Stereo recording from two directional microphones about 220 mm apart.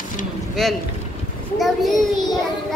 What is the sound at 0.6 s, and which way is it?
A child's voice, centre (ahead or behind).